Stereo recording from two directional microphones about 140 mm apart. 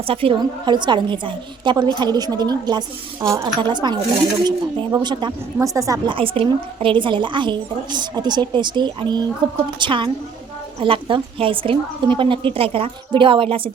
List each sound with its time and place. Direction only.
0.1 s a woman's voice: 40° right (ahead or behind); by 3.4 s 20° right (ahead or behind)
3.4 s a woman's voice: 35° right (ahead or behind)
6.1 s a woman's voice: 40° right (ahead or behind)